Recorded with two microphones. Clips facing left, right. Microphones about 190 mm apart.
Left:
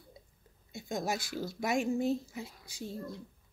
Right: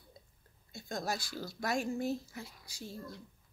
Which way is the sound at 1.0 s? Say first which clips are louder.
Left 3 dB; 20° left (ahead or behind).